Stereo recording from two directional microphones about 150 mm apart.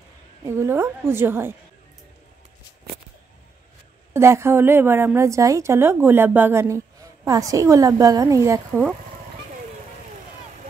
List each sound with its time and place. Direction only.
0.5 s a woman's voice: 15° right (ahead or behind)
4.1 s a woman's voice: 15° right (ahead or behind)